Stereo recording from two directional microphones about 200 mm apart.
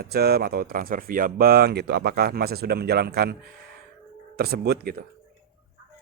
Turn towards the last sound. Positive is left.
turn(degrees=-50)  # may be behind; listen again after turning